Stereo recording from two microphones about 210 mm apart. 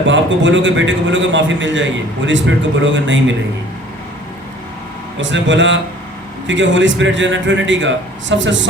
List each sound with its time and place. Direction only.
0.0 s a man's voice: 60° right (ahead or behind)
5.2 s a man's voice: 60° right (ahead or behind)